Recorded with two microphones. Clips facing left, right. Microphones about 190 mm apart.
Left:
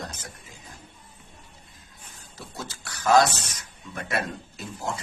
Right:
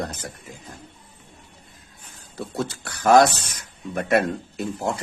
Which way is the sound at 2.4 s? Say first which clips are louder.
Right 11 dB; 60° right (ahead or behind).